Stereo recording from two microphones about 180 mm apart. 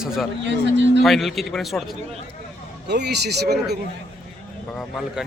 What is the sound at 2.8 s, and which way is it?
Speech, 70° right (ahead or behind).